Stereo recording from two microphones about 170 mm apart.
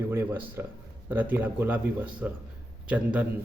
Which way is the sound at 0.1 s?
10° right (ahead or behind).